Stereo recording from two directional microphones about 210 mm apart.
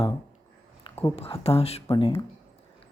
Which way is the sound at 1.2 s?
25° left (ahead or behind).